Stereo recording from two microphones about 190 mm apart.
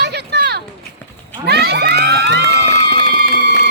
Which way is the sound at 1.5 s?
60° right (ahead or behind).